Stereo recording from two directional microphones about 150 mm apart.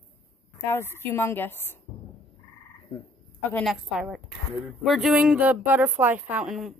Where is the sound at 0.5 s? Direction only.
15° left (ahead or behind).